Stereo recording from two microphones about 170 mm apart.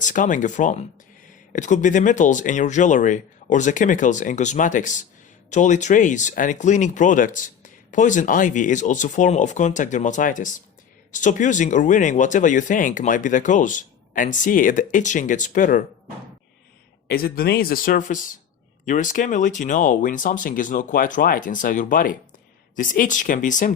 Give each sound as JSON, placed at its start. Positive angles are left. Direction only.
{"t": 0.0, "sound": "speech", "side_deg": 50}
{"t": 17.1, "sound": "speech", "side_deg": 65}